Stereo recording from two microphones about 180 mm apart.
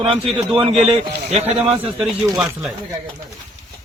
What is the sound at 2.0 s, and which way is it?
Speech, centre (ahead or behind).